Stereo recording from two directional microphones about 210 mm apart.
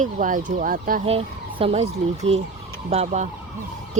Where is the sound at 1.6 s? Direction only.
30° right (ahead or behind).